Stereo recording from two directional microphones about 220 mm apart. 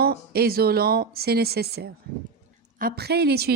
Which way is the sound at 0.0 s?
45° right (ahead or behind).